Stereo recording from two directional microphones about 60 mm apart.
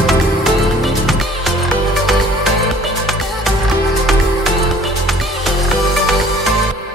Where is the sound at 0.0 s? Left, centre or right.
Centre.